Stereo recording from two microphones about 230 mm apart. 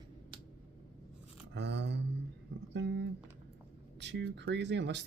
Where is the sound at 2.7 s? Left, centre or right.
Right.